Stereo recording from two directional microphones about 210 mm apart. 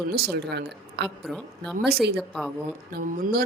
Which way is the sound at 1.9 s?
50° right (ahead or behind).